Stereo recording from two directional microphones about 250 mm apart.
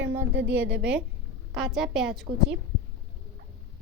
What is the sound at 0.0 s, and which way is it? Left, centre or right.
Speech, right.